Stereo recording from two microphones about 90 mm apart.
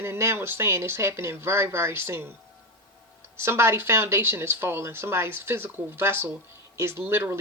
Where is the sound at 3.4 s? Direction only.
30° right (ahead or behind).